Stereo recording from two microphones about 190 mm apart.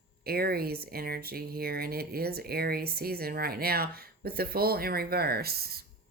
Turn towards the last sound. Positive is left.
turn(degrees=-55)  # may be behind; listen again after turning